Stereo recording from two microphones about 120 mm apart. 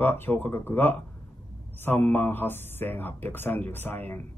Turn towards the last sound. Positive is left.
turn(degrees=15)  # may be behind; listen again after turning